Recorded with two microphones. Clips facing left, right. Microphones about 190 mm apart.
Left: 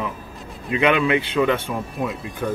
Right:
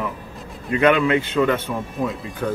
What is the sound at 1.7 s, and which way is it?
Speech, centre (ahead or behind).